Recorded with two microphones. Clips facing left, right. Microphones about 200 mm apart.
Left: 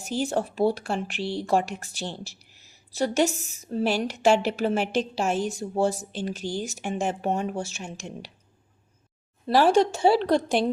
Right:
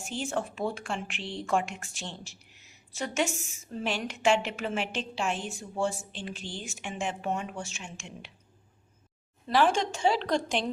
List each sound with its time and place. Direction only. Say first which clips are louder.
0.1 s speech: left 6 dB; 40° left (ahead or behind)
9.5 s speech: left 6 dB; 40° left (ahead or behind)